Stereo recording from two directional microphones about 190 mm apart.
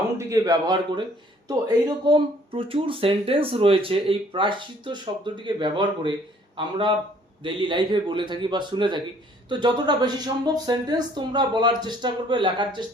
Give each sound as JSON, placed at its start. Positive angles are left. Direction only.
{"t": 0.3, "sound": "a man's voice", "side_deg": -15}